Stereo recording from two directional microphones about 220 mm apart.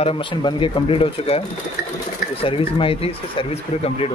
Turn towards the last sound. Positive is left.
turn(degrees=25)  # may be behind; listen again after turning